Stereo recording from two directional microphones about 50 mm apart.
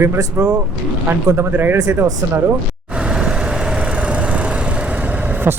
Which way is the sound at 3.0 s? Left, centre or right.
Centre.